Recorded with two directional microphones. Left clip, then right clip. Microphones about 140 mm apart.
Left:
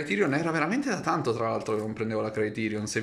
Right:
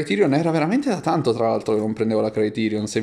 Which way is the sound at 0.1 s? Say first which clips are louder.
Right 7 dB; 30° right (ahead or behind).